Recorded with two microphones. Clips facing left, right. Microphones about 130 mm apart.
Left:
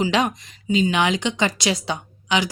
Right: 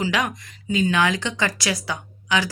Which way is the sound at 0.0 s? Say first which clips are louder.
Left 3 dB; 25° left (ahead or behind).